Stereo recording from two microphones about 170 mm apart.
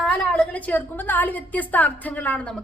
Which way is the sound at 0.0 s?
10° left (ahead or behind).